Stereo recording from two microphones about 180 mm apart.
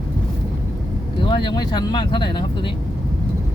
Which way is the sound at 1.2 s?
25° left (ahead or behind).